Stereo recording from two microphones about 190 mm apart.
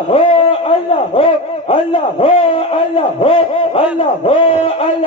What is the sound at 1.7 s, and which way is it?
A man's voice, 30° left (ahead or behind).